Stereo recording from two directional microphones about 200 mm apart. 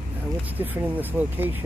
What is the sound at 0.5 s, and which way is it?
Speech, 10° right (ahead or behind).